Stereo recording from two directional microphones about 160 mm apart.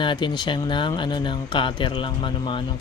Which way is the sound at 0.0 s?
30° left (ahead or behind).